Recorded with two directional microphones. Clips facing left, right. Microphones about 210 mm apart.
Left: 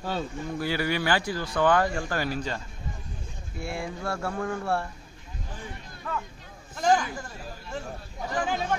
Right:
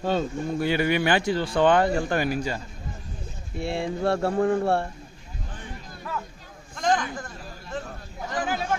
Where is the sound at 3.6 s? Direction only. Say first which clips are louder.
Right 7 dB; 30° right (ahead or behind).